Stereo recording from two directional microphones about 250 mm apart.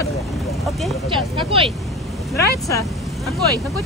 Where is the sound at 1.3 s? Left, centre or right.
Right.